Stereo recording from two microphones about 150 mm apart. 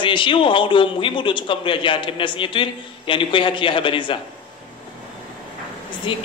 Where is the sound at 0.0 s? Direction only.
35° left (ahead or behind).